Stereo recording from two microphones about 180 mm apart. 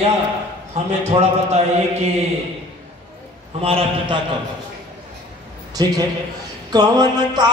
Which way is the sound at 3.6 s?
30° right (ahead or behind).